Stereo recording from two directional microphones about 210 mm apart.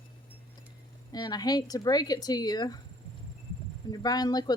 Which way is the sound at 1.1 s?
20° left (ahead or behind).